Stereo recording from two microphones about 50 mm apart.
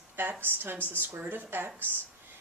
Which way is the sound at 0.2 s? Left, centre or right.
Right.